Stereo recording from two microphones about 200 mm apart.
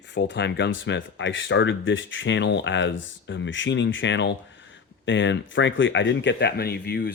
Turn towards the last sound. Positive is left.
turn(degrees=55)  # may be behind; listen again after turning